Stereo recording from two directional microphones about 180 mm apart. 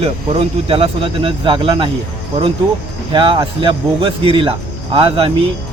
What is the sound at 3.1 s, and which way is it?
Speech, 25° right (ahead or behind).